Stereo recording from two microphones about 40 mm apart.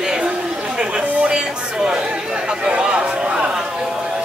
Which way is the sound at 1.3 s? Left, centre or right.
Centre.